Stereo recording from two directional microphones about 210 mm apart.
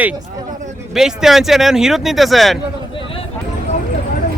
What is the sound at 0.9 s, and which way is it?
Speech, centre (ahead or behind).